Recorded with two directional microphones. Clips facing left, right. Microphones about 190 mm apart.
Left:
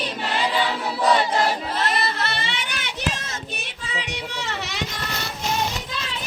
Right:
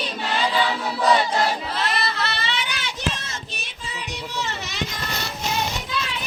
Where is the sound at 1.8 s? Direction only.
45° left (ahead or behind).